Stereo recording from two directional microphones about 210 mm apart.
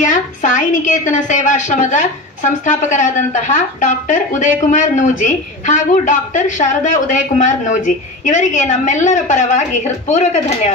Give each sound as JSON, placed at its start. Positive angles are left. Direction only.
{"t": 0.0, "sound": "a woman's voice", "side_deg": 35}